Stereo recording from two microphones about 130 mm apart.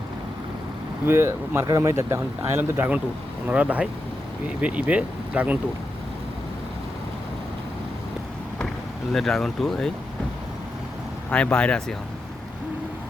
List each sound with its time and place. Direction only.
1.0 s speech: 20° right (ahead or behind)
9.1 s speech: 5° left (ahead or behind)
11.3 s speech: 10° left (ahead or behind)